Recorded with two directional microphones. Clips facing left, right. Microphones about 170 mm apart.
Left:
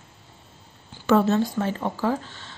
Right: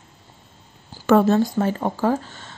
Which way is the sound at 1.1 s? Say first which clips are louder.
Right 4 dB; 50° right (ahead or behind).